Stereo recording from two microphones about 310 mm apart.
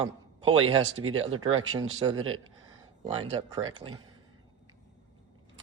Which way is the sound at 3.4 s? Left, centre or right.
Centre.